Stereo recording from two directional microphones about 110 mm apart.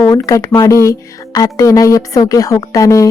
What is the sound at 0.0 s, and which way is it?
Speech, 30° left (ahead or behind).